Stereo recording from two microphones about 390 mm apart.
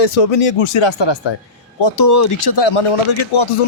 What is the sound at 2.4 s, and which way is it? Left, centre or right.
Speech, left.